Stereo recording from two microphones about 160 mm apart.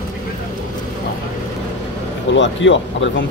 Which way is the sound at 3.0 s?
90° left.